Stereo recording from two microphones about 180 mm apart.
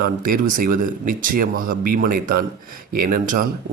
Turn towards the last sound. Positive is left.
turn(degrees=-50)  # may be behind; listen again after turning